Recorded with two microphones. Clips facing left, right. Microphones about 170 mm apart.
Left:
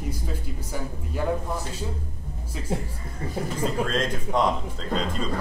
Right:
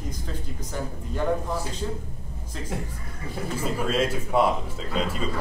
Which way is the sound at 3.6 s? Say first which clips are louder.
Right 1 dB; 5° right (ahead or behind).